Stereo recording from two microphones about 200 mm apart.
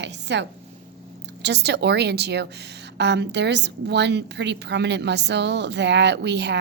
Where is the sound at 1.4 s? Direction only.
60° right (ahead or behind).